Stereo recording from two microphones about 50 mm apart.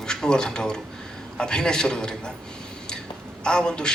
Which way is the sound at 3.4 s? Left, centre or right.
Centre.